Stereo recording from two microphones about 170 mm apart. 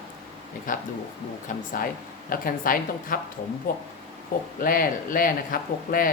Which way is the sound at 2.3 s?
55° left (ahead or behind).